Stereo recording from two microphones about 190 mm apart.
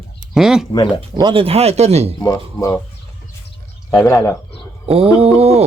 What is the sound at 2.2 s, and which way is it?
Speech, 15° left (ahead or behind).